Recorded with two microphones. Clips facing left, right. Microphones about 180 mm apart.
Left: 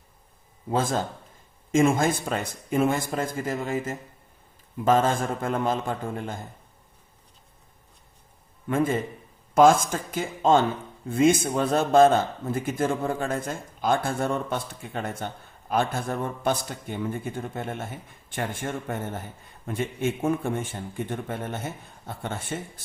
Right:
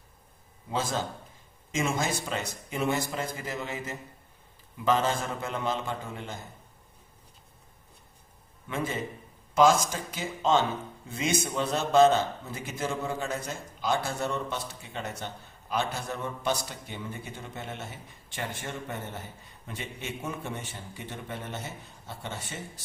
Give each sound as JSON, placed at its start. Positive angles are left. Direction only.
{"t": 0.7, "sound": "a man's voice", "side_deg": 50}
{"t": 8.6, "sound": "a man's voice", "side_deg": 50}